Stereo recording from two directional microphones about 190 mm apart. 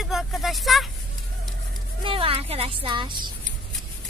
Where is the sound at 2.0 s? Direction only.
30° right (ahead or behind).